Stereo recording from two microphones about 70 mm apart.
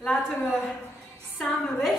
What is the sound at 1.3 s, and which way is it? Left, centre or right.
Speech, centre.